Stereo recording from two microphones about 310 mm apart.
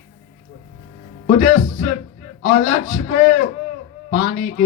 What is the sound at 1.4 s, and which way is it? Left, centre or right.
A man's voice, left.